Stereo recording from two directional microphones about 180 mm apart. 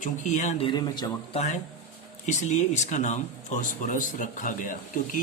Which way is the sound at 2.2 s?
40° left (ahead or behind).